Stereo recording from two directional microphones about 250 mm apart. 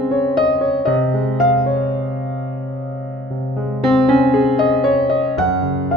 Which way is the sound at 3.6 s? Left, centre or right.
Centre.